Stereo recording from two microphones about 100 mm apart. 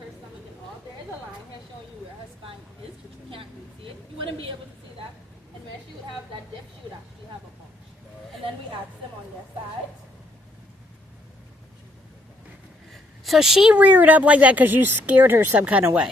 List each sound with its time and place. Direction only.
4.3 s a woman's voice: 65° right (ahead or behind)
12.9 s a sound: centre (ahead or behind)
13.7 s speech: 15° right (ahead or behind)